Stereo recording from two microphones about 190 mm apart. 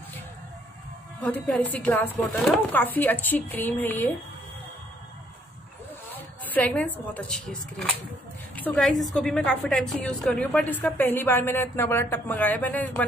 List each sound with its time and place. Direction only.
1.2 s a woman's voice: 5° left (ahead or behind)
6.1 s a woman's voice: 10° left (ahead or behind)